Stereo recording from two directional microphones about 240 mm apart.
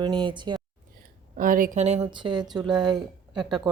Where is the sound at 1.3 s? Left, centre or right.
Right; by 2.6 s centre.